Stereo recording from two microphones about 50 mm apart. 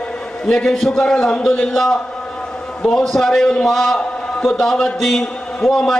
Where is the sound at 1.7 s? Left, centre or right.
Centre.